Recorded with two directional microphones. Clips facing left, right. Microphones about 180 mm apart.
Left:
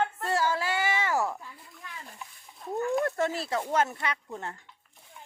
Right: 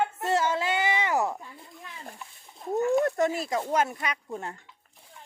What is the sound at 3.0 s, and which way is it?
Speech, 15° right (ahead or behind).